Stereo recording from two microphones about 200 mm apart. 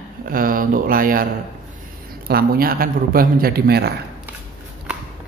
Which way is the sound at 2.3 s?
50° right (ahead or behind).